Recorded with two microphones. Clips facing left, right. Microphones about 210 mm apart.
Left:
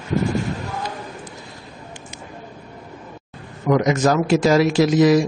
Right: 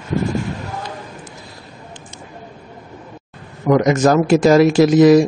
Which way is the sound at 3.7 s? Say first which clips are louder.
Right 4 dB; 50° right (ahead or behind).